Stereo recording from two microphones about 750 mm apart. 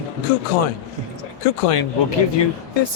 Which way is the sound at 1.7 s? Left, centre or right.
Left.